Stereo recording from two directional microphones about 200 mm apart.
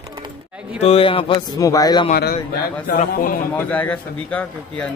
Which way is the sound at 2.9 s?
45° left (ahead or behind).